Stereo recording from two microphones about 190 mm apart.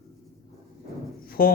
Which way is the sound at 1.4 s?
50° left (ahead or behind).